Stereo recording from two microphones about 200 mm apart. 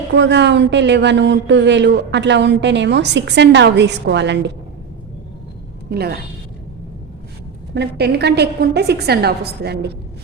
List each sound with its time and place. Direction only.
0.1 s speech: 60° right (ahead or behind)
5.9 s a woman's voice: 50° right (ahead or behind)
7.7 s speech: 55° right (ahead or behind)